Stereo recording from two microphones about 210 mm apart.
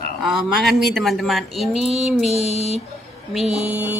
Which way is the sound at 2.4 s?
30° left (ahead or behind).